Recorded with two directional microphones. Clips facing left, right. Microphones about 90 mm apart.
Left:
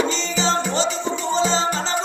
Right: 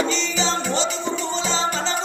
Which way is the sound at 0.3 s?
35° left (ahead or behind).